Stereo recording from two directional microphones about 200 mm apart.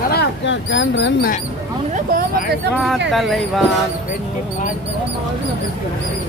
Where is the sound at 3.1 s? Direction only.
Centre (ahead or behind).